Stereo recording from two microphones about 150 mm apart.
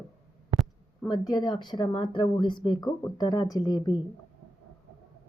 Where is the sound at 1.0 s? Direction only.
25° left (ahead or behind).